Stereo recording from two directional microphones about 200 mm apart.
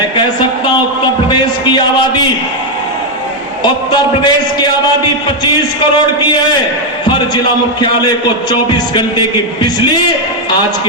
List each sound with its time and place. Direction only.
1.3 s a sound: 20° left (ahead or behind)
3.6 s a man's voice: 20° left (ahead or behind)
7.1 s a man's voice: 20° left (ahead or behind)